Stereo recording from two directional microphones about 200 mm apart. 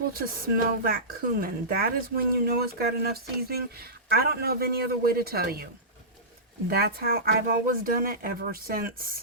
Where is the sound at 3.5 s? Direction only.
50° right (ahead or behind).